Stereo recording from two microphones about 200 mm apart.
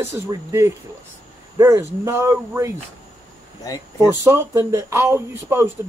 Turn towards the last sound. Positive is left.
turn(degrees=-10)  # may be behind; listen again after turning